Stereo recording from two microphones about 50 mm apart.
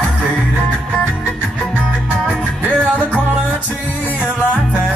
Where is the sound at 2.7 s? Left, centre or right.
Left.